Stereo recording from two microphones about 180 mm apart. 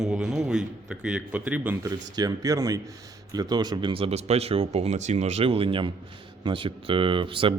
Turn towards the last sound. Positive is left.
turn(degrees=-30)  # may be behind; listen again after turning